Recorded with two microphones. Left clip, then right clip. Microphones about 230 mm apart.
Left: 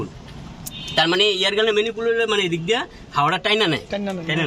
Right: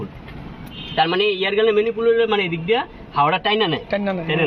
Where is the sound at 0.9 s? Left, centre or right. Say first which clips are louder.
Left 1 dB; left.